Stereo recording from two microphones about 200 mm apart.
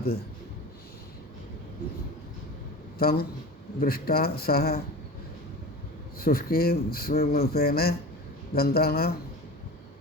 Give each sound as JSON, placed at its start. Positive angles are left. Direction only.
{"t": 3.0, "sound": "speech", "side_deg": 50}
{"t": 6.1, "sound": "speech", "side_deg": 50}